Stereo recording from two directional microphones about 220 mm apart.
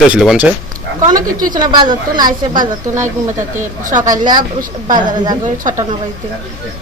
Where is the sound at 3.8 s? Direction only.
35° right (ahead or behind).